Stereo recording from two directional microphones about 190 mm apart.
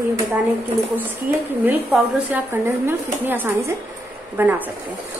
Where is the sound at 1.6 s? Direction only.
10° right (ahead or behind).